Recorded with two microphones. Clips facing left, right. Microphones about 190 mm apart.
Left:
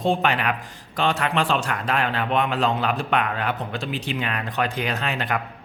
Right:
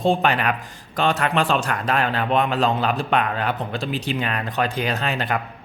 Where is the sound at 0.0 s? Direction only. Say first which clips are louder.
Right 2 dB; 35° right (ahead or behind).